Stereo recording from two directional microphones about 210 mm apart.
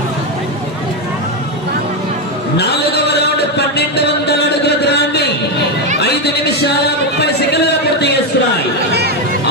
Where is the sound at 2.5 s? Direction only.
50° left (ahead or behind).